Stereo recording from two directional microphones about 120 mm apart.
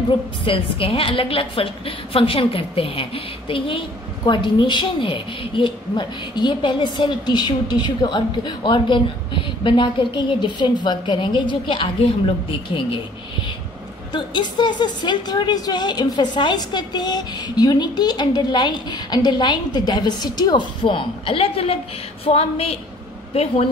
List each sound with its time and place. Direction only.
0.5 s a woman's voice: 50° left (ahead or behind)
14.1 s a woman's voice: 40° left (ahead or behind); by 23.7 s 55° left (ahead or behind)